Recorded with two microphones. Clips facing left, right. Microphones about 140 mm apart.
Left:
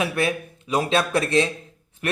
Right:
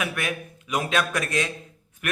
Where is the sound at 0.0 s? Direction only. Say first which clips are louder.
Left 6 dB; 30° left (ahead or behind).